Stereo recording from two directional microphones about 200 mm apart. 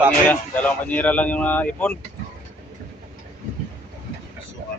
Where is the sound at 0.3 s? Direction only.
5° left (ahead or behind).